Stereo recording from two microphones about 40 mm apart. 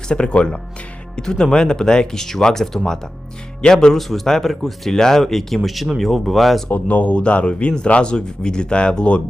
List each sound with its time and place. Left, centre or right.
0.1 s speech: left
3.9 s speech: centre
6.7 s speech: left
7.2 s speech: left